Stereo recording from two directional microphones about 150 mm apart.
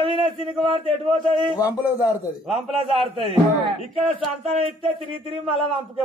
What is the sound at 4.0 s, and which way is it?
Speech, 45° right (ahead or behind).